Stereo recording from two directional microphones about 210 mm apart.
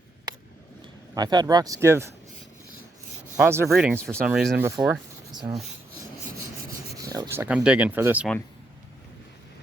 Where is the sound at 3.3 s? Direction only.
10° right (ahead or behind).